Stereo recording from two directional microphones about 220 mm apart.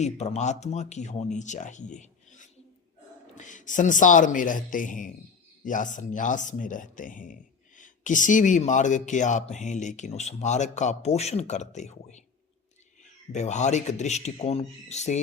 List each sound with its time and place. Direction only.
0.0 s speech: 30° left (ahead or behind)
13.3 s speech: 30° left (ahead or behind)